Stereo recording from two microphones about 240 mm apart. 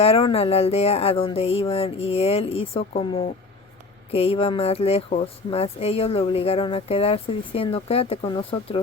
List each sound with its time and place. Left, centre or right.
0.0 s speech: left